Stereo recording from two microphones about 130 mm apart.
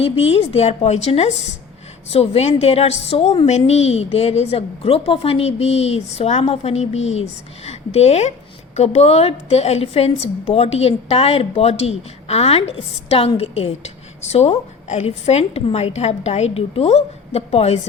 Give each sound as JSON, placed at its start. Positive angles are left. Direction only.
{"t": 0.0, "sound": "a woman's voice", "side_deg": 50}